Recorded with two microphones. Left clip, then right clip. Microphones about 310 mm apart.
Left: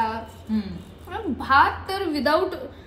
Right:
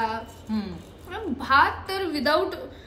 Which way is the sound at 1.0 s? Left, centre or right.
Centre.